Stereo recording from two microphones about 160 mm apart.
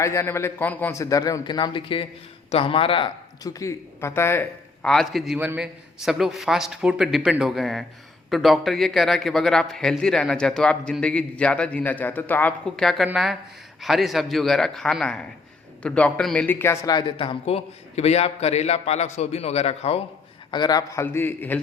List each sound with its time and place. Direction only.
0.0 s a man's voice: 15° left (ahead or behind); by 20.0 s 40° left (ahead or behind)
20.5 s speech: 25° left (ahead or behind)